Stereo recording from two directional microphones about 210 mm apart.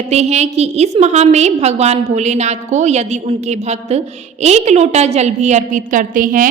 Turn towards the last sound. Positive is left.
turn(degrees=-40)  # may be behind; listen again after turning